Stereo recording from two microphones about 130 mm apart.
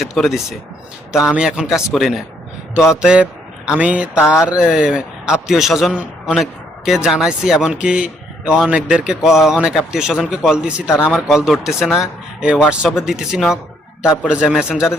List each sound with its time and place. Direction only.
0.0 s a man's voice: centre (ahead or behind)